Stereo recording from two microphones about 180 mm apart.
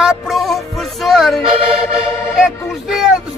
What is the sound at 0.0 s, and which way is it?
Music, centre (ahead or behind).